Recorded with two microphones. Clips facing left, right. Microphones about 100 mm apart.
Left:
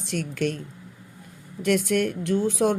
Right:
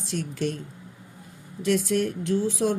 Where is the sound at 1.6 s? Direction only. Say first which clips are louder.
Left 1 dB; 60° left (ahead or behind).